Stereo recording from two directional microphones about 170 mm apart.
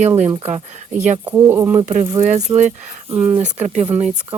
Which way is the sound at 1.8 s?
45° right (ahead or behind).